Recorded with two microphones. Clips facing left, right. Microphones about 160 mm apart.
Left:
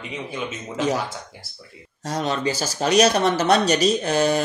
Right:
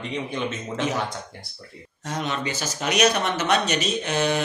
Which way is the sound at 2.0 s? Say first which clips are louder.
Left 4 dB; 35° left (ahead or behind).